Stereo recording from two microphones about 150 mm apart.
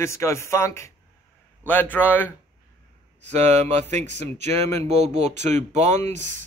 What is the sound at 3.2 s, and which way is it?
Speech, 50° right (ahead or behind).